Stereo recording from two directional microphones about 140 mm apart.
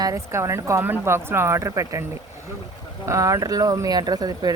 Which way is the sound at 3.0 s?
20° right (ahead or behind).